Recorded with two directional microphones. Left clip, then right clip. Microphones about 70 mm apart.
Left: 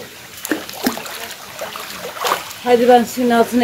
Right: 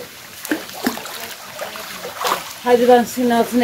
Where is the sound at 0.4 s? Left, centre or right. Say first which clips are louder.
Left 1 dB; left.